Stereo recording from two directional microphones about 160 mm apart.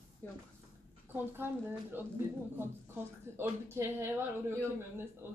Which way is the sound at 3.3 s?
15° right (ahead or behind).